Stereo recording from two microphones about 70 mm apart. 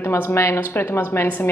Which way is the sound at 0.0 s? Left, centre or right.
Left.